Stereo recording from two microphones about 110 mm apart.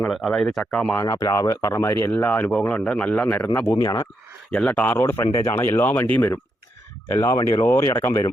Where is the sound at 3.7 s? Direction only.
35° left (ahead or behind).